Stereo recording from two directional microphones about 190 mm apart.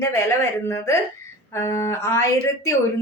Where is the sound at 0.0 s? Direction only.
15° left (ahead or behind).